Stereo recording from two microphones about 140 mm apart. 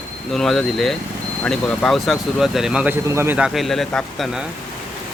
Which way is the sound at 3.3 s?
5° right (ahead or behind).